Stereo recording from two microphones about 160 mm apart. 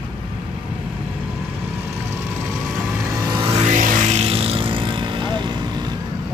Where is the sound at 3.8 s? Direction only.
50° right (ahead or behind); by 5.9 s 25° right (ahead or behind).